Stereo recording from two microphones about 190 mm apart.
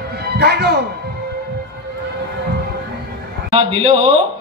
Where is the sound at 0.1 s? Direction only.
55° right (ahead or behind).